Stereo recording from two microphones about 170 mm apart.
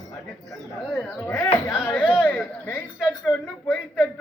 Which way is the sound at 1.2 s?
20° left (ahead or behind).